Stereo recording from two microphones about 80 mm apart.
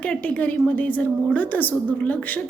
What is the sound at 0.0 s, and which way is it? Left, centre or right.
A woman's voice, centre.